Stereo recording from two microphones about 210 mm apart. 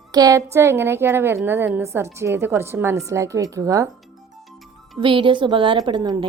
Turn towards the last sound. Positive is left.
turn(degrees=-20)  # may be behind; listen again after turning